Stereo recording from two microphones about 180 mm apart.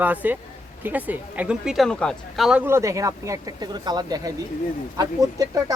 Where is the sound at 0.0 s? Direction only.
10° right (ahead or behind).